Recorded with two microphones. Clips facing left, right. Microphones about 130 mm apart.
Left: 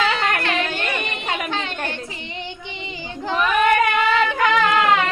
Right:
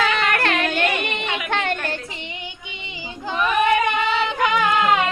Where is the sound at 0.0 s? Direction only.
55° right (ahead or behind).